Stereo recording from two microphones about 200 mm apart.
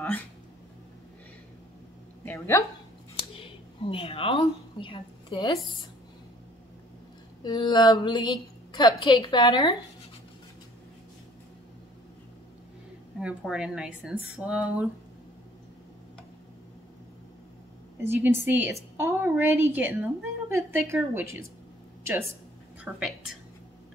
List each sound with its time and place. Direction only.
2.2 s speech: 15° left (ahead or behind)
3.2 s a sound: 25° left (ahead or behind)
7.4 s a woman's voice: 20° left (ahead or behind)
13.2 s speech: 5° right (ahead or behind)
17.9 s a woman's voice: 10° right (ahead or behind)
22.9 s speech: centre (ahead or behind)